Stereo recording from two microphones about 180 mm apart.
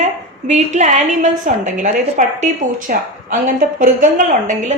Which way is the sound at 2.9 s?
50° right (ahead or behind).